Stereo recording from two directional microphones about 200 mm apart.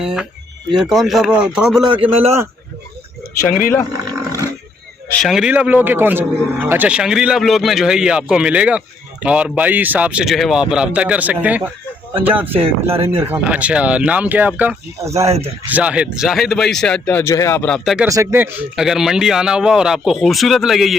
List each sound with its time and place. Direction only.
0.0 s a man's voice: 5° right (ahead or behind)
1.9 s speech: 30° right (ahead or behind)
3.4 s speech: 40° left (ahead or behind)
3.9 s roaring cats: 15° right (ahead or behind)
5.1 s a man's voice: centre (ahead or behind)
12.5 s speech: 30° right (ahead or behind)
13.1 s speech: 10° right (ahead or behind)
15.2 s speech: 30° right (ahead or behind)
15.7 s a man's voice: 5° right (ahead or behind)
18.1 s a man's voice: 15° right (ahead or behind)